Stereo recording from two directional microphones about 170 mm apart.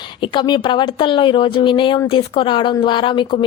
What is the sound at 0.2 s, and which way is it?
A woman's voice, 25° left (ahead or behind).